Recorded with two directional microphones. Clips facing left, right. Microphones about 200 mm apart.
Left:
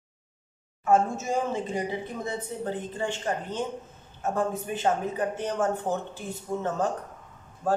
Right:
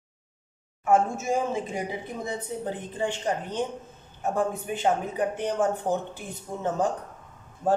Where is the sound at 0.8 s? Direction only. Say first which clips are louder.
Even; 10° right (ahead or behind).